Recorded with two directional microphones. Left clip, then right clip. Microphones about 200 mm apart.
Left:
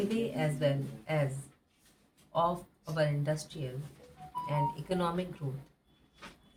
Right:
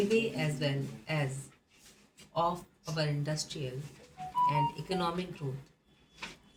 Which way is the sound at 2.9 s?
35° left (ahead or behind).